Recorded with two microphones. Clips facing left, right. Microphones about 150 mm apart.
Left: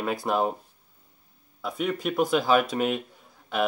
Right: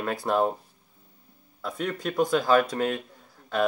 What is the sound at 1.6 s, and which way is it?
Speech, 5° left (ahead or behind).